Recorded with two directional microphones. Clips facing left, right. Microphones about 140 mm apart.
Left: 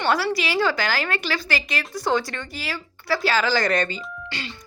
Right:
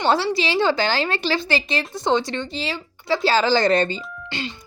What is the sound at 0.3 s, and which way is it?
A child's voice, 25° right (ahead or behind).